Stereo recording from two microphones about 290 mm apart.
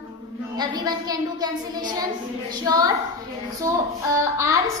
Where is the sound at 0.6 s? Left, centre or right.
Centre.